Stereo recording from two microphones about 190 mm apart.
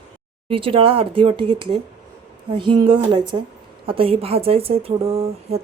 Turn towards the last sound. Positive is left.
turn(degrees=-30)  # may be behind; listen again after turning